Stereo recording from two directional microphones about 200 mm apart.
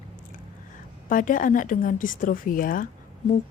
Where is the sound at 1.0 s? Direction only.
40° left (ahead or behind).